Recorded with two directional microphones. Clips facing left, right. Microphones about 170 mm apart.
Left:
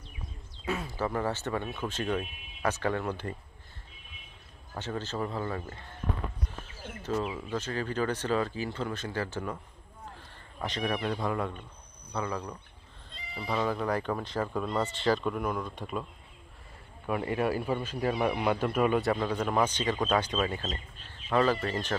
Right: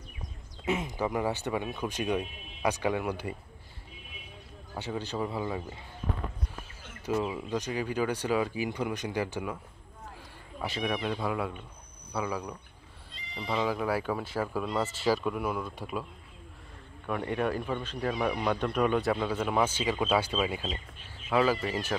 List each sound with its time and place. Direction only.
0.7 s speech: 20° right (ahead or behind)
4.7 s speech: 15° right (ahead or behind)
7.0 s bird: 10° right (ahead or behind)
7.3 s speech: 15° right (ahead or behind)
10.6 s speech: 5° right (ahead or behind)
13.7 s speech: 5° right (ahead or behind)
17.0 s speech: 5° left (ahead or behind)